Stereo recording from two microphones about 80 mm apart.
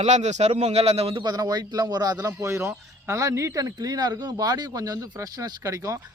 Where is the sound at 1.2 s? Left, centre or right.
Right.